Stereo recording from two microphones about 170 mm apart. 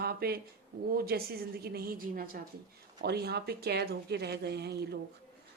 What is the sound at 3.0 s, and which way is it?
A woman's voice, 75° right (ahead or behind).